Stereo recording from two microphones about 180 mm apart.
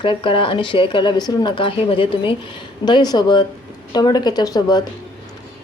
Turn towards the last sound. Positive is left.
turn(degrees=20)  # may be behind; listen again after turning